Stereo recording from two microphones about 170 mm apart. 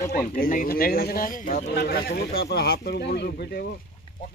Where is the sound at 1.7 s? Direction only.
65° left (ahead or behind).